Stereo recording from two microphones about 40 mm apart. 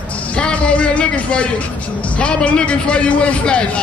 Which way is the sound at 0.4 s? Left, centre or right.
Left.